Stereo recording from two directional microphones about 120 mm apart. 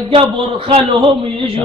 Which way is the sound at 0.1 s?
45° right (ahead or behind).